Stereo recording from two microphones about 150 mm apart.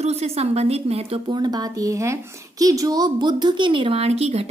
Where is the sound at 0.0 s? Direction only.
45° right (ahead or behind).